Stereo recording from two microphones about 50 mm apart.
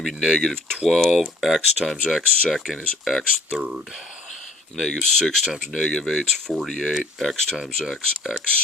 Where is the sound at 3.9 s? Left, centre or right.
Centre.